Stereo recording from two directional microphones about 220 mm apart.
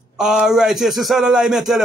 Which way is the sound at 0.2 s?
Centre (ahead or behind).